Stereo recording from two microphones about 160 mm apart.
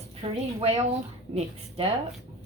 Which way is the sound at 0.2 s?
40° right (ahead or behind).